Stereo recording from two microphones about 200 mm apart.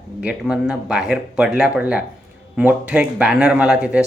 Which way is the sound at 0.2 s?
5° right (ahead or behind).